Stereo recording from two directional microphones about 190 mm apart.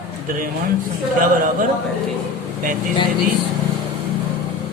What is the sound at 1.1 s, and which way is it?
Speech, 45° right (ahead or behind).